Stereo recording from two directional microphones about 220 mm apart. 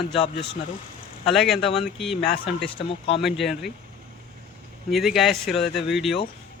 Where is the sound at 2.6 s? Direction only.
25° left (ahead or behind).